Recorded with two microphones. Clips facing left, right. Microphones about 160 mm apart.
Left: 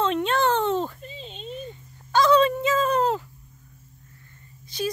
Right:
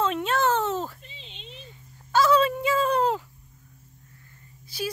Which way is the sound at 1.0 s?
45° left (ahead or behind).